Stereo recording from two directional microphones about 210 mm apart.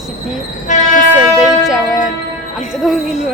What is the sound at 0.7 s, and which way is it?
Train, 35° left (ahead or behind).